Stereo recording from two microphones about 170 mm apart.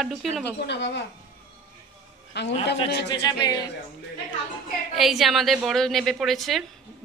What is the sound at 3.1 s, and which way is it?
Speech, 25° left (ahead or behind).